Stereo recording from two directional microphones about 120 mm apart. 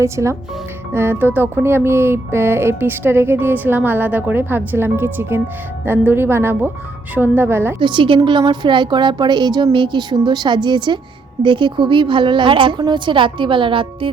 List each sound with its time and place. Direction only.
0.0 s a woman's voice: 25° right (ahead or behind)
7.8 s a woman's voice: 40° right (ahead or behind)